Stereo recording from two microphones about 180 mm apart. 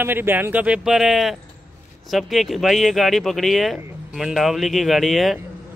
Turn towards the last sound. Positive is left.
turn(degrees=0)  # may be behind; listen again after turning